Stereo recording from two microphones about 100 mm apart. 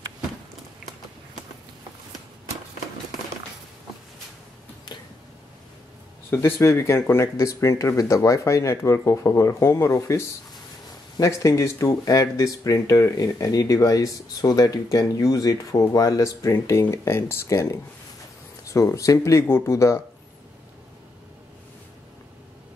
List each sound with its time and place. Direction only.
6.3 s speech: 25° left (ahead or behind)